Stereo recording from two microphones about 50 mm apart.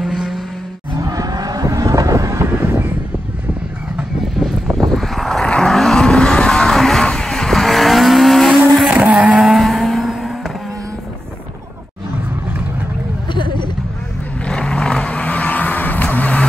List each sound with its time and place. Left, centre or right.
0.0 s vehicle: centre
1.7 s vehicle: right
2.5 s vehicle: right
4.4 s vehicle: centre
6.8 s music: centre
7.1 s vehicle: centre
8.9 s vehicle: right
9.3 s vehicle: centre
9.7 s vehicle: centre
14.4 s vehicle: centre